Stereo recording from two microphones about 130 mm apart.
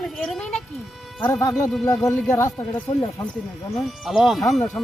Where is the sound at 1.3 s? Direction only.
25° left (ahead or behind).